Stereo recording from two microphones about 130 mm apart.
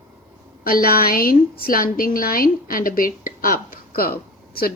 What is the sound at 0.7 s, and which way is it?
A woman's voice, 90° left.